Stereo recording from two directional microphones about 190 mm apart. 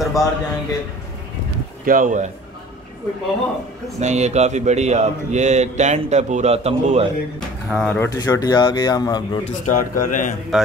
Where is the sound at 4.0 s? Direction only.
35° right (ahead or behind).